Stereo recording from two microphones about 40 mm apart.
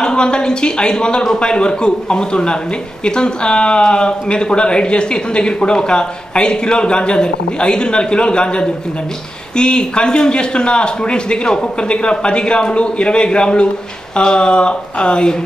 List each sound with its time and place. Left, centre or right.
0.0 s speech: left